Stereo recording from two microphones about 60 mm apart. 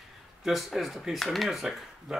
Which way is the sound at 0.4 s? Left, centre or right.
Centre.